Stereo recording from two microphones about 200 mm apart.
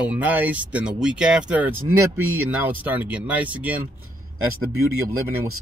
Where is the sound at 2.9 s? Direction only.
10° right (ahead or behind).